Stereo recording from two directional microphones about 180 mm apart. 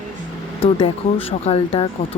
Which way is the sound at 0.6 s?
30° left (ahead or behind).